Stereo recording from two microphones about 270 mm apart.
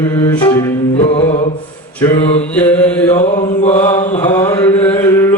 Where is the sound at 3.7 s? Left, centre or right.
Centre.